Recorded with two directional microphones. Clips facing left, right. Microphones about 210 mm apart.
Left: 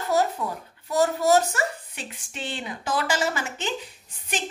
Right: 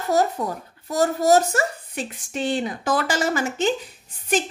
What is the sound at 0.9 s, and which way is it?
A woman's voice, 45° right (ahead or behind).